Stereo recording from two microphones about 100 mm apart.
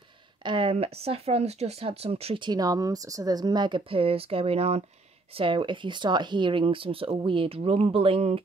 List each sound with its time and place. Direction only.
0.4 s speech: 55° right (ahead or behind); by 2.3 s 85° right
2.3 s speech: 45° right (ahead or behind); by 4.8 s 90° right
5.3 s speech: 60° right (ahead or behind); by 8.4 s 80° right